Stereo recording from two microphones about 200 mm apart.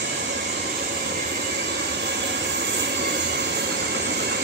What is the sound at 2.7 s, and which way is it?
Train, 60° right (ahead or behind).